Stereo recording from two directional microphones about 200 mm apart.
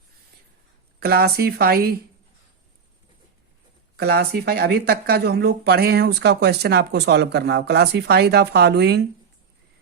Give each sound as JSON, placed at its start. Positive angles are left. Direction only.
{"t": 0.9, "sound": "speech", "side_deg": -50}
{"t": 3.9, "sound": "speech", "side_deg": -50}